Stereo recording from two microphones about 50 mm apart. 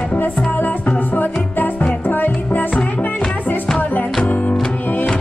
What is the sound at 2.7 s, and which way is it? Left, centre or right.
Music, left.